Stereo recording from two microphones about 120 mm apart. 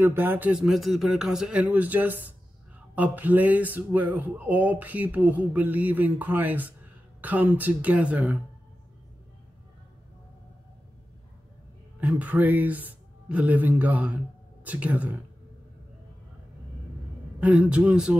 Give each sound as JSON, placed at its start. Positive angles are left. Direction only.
{"t": 0.0, "sound": "speech", "side_deg": -20}
{"t": 0.6, "sound": "speech", "side_deg": 0}
{"t": 12.0, "sound": "speech", "side_deg": -10}
{"t": 17.4, "sound": "speech", "side_deg": -10}